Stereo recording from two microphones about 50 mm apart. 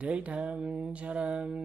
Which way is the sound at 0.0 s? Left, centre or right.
Right.